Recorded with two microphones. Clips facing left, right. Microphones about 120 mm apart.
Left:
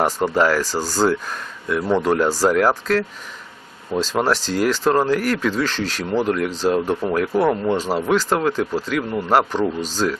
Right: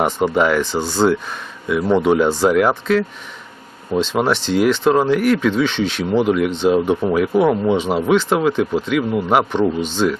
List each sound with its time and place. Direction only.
0.2 s speech: centre (ahead or behind)
4.1 s speech: 5° left (ahead or behind)